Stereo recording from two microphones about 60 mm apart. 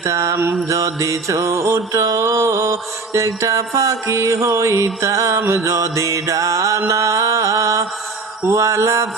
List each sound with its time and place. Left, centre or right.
0.0 s music: right
5.7 s music: right